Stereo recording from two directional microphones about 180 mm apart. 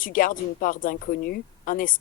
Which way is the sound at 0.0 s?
50° left (ahead or behind).